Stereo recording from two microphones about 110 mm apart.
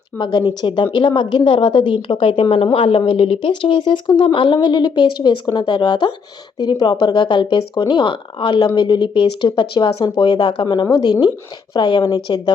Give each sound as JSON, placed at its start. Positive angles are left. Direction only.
{"t": 0.2, "sound": "a woman's voice", "side_deg": 40}